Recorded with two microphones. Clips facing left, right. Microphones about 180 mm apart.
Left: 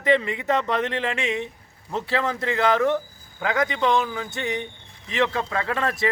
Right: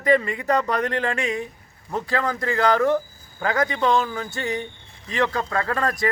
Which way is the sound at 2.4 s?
20° left (ahead or behind).